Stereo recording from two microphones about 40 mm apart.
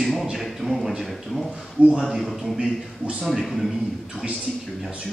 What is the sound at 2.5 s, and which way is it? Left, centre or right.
Speech, right.